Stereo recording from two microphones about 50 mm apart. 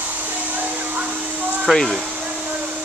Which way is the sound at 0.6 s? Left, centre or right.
Right.